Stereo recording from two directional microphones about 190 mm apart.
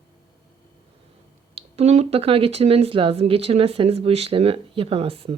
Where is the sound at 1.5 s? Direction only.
35° right (ahead or behind).